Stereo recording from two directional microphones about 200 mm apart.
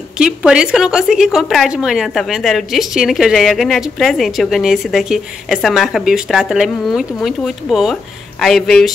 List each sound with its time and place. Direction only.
0.2 s a woman's voice: 5° right (ahead or behind)